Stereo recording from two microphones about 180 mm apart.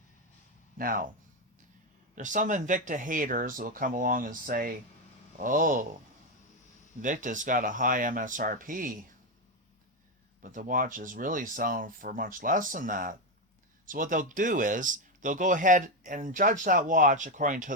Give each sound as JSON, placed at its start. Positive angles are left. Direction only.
{"t": 0.8, "sound": "speech", "side_deg": -50}
{"t": 2.1, "sound": "speech", "side_deg": -45}
{"t": 7.0, "sound": "speech", "side_deg": -45}
{"t": 10.4, "sound": "speech", "side_deg": -50}